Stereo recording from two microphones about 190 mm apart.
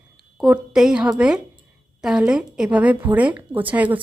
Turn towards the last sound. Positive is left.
turn(degrees=-10)  # may be behind; listen again after turning